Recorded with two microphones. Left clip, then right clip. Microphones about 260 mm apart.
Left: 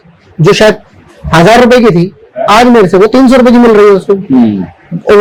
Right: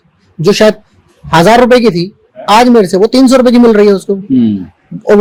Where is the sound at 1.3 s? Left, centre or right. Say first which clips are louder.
Left 2 dB; right.